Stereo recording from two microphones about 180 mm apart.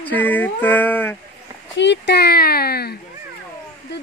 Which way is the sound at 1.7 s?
75° left (ahead or behind).